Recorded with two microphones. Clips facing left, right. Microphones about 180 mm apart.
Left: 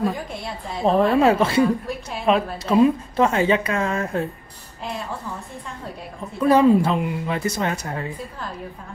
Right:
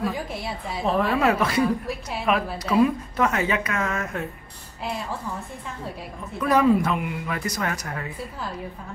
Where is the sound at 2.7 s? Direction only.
25° left (ahead or behind).